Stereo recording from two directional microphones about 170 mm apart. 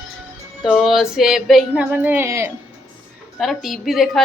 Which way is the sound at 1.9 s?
10° right (ahead or behind).